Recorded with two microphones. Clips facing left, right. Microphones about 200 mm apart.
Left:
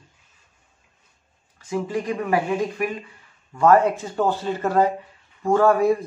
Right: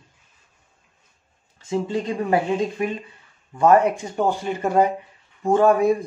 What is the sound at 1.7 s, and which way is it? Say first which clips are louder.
Speech: right 1 dB; 25° right (ahead or behind).